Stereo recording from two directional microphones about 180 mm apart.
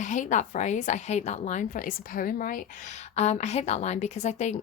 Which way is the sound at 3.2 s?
40° left (ahead or behind).